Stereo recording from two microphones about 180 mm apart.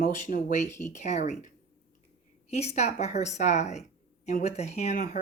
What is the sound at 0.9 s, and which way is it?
Speech, 40° left (ahead or behind).